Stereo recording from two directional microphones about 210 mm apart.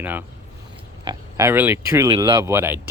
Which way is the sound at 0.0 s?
10° right (ahead or behind).